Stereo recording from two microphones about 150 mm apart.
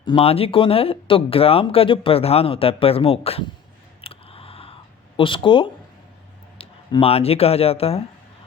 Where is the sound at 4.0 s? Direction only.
40° left (ahead or behind).